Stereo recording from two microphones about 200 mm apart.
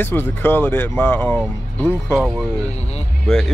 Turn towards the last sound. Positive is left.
turn(degrees=0)  # may be behind; listen again after turning